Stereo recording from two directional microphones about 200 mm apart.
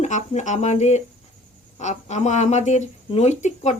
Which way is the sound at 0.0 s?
35° left (ahead or behind).